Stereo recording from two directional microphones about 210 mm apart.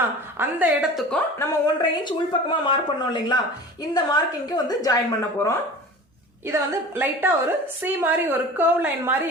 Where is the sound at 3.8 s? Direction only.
20° left (ahead or behind).